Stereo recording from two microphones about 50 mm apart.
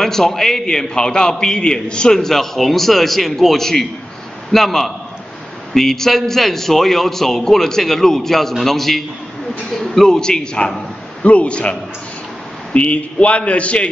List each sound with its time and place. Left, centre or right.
0.0 s a man's voice: centre; by 13.8 s left